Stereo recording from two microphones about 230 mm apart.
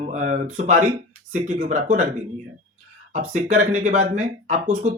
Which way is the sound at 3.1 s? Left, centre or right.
Right.